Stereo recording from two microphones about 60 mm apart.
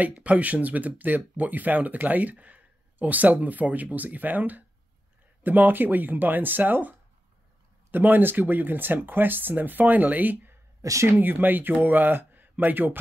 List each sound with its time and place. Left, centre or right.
0.0 s speech: right
10.8 s speech: right
11.1 s speech: right